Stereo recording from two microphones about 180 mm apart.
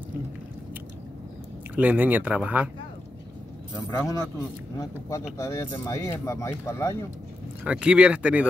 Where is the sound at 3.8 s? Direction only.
15° left (ahead or behind).